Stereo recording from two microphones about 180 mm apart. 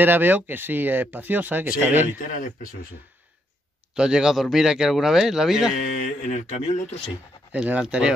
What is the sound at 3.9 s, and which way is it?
Speech, 5° right (ahead or behind).